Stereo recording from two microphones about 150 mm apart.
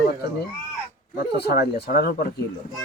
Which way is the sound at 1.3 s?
90° left.